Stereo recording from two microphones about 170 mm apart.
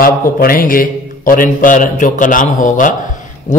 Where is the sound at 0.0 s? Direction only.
55° left (ahead or behind).